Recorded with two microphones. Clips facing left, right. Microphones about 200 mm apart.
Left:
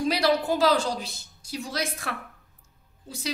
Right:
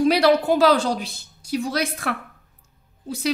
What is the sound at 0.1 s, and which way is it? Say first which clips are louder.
A woman's voice: right 6 dB; 65° right (ahead or behind).